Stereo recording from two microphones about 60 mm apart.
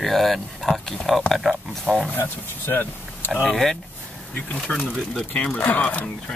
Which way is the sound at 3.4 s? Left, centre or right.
Centre.